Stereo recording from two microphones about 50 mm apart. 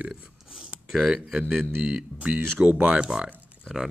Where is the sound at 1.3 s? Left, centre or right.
Centre.